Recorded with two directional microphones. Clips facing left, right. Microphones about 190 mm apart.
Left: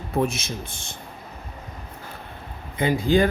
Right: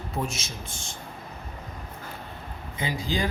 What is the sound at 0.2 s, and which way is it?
Speech, 55° left (ahead or behind).